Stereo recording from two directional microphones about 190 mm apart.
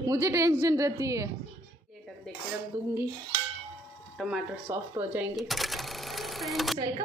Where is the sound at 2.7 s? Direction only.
15° right (ahead or behind).